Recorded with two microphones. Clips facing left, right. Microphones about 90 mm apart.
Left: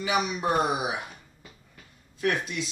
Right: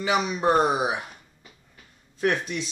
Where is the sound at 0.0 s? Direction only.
30° right (ahead or behind).